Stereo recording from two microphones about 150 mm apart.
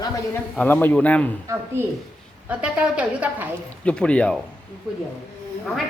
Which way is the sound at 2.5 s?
5° right (ahead or behind).